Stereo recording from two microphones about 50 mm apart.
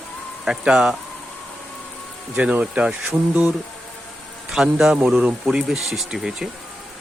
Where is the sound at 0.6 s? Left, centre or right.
Centre.